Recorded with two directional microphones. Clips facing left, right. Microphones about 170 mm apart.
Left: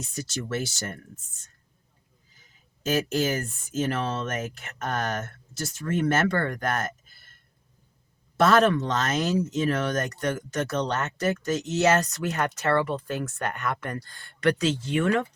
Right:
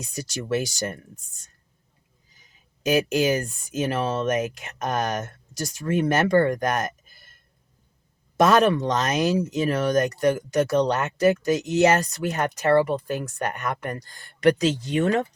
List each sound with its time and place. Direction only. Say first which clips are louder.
0.0 s speech: right 1 dB; 15° right (ahead or behind)
2.8 s speech: right 4 dB; 15° right (ahead or behind)
8.4 s speech: right 2 dB; 15° right (ahead or behind)
12.0 s speech: right 2 dB; 35° right (ahead or behind)
12.4 s speech: right 4 dB; 15° right (ahead or behind)
12.7 s speech: right 7 dB; 40° right (ahead or behind)
13.1 s speech: right 2 dB; 15° right (ahead or behind)
14.9 s speech: right 1 dB; 35° right (ahead or behind)